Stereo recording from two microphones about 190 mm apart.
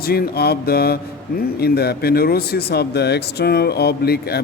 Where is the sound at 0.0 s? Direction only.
55° left (ahead or behind).